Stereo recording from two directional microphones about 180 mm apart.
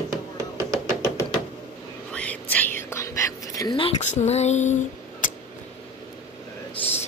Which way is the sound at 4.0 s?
40° left (ahead or behind).